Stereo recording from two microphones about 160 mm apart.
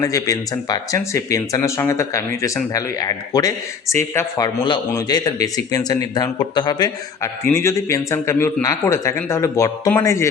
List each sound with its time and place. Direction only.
0.0 s speech: 20° left (ahead or behind)